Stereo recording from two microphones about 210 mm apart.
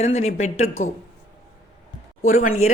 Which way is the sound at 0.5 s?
75° left (ahead or behind).